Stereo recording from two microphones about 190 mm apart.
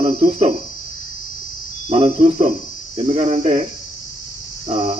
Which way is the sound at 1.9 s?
30° right (ahead or behind).